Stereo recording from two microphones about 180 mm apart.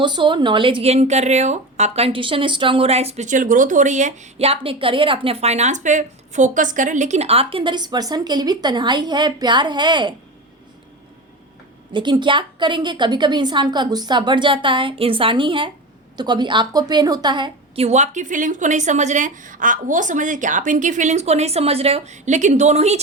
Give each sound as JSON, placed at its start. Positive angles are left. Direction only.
{"t": 0.0, "sound": "a woman's voice", "side_deg": -25}
{"t": 11.9, "sound": "a woman's voice", "side_deg": -25}